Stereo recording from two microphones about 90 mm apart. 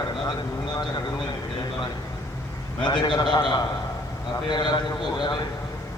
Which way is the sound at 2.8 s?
60° left (ahead or behind).